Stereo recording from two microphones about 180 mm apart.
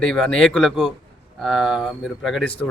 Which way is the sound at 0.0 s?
5° left (ahead or behind).